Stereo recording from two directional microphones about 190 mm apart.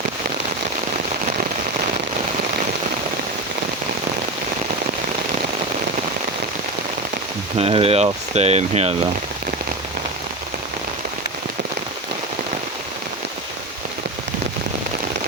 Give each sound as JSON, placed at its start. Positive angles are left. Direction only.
{"t": 7.6, "sound": "speech", "side_deg": -30}